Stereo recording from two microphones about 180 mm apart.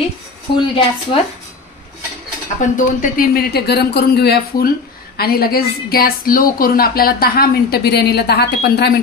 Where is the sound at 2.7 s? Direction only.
50° left (ahead or behind).